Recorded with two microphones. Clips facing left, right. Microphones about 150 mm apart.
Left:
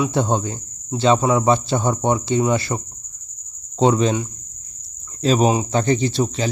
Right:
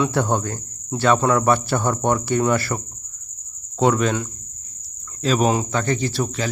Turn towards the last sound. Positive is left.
turn(degrees=25)  # may be behind; listen again after turning